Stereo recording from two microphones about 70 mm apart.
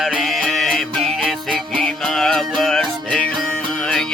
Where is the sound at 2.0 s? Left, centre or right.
Centre.